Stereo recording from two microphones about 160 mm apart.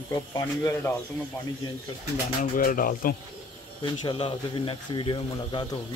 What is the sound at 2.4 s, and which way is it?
Speech, 60° left (ahead or behind).